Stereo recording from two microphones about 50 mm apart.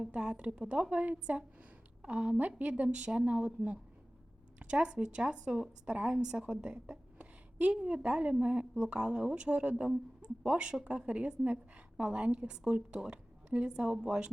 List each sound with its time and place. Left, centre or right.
0.0 s speech: centre
0.9 s a woman's voice: right; by 14.3 s centre